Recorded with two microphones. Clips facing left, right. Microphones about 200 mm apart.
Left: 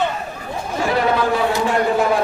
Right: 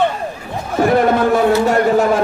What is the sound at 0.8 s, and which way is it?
A man's voice, 50° right (ahead or behind).